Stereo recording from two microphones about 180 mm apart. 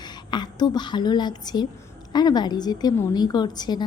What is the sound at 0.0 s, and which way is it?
A woman's voice, 25° left (ahead or behind).